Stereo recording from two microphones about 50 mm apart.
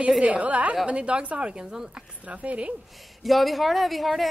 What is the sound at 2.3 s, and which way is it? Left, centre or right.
Speech, right.